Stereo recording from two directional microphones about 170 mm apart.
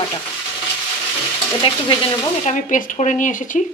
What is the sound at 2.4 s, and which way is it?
Speech, 45° left (ahead or behind).